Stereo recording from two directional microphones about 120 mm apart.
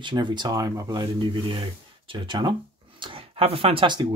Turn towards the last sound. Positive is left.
turn(degrees=-40)  # may be behind; listen again after turning